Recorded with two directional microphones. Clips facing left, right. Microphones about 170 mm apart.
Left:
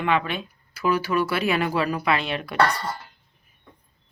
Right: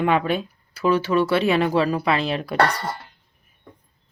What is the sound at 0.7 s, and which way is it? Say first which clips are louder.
Speech: right 4 dB; 30° right (ahead or behind).